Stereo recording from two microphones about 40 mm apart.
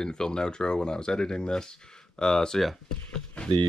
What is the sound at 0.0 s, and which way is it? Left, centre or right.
Speech, centre.